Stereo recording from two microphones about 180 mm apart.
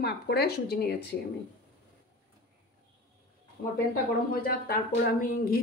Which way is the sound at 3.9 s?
55° left (ahead or behind).